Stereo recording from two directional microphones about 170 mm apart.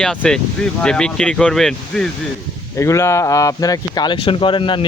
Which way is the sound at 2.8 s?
15° left (ahead or behind).